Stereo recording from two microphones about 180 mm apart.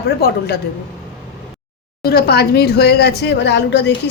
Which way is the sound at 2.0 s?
60° left (ahead or behind).